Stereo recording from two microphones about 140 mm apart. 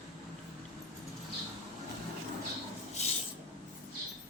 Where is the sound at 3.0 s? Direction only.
50° left (ahead or behind).